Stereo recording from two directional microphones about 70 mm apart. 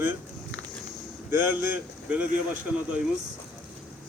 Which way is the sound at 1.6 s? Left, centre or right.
Right.